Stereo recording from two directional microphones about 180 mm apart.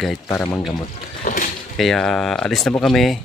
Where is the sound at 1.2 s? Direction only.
50° left (ahead or behind).